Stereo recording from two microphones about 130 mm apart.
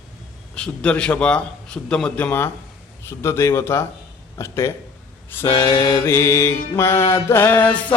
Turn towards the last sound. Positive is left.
turn(degrees=15)  # may be behind; listen again after turning